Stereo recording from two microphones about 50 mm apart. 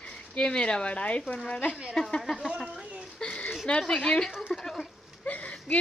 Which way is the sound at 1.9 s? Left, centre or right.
Centre.